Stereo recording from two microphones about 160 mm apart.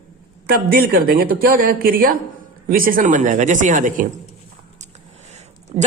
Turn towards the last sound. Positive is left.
turn(degrees=-40)  # may be behind; listen again after turning